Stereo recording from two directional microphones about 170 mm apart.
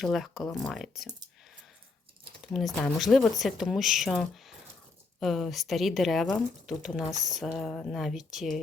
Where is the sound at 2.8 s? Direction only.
Centre (ahead or behind).